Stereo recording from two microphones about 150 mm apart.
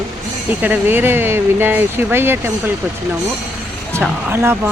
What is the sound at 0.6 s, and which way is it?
Speech, 10° right (ahead or behind).